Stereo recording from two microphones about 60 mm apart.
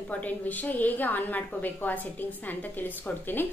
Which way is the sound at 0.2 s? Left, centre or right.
Left.